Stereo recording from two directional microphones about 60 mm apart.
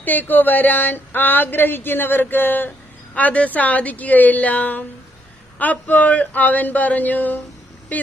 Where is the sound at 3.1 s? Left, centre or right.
Left.